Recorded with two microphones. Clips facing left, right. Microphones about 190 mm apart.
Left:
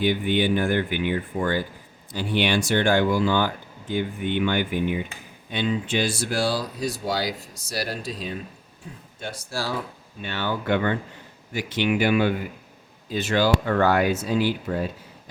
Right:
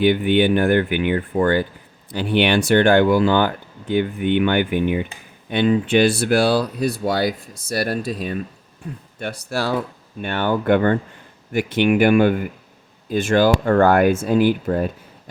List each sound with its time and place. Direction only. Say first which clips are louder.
0.0 s speech: right 6 dB; 60° right (ahead or behind)
10.2 s speech: right 7 dB; 55° right (ahead or behind)